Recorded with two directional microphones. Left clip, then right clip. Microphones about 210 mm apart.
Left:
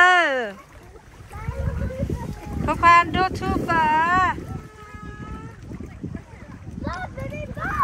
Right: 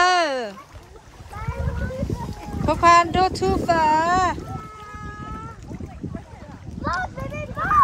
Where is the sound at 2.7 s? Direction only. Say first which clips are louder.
Even; 20° right (ahead or behind).